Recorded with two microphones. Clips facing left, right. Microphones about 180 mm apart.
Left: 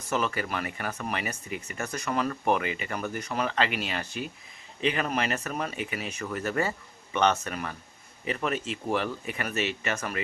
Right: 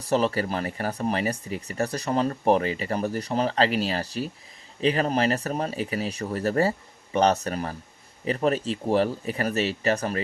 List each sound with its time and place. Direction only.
0.0 s speech: 35° right (ahead or behind)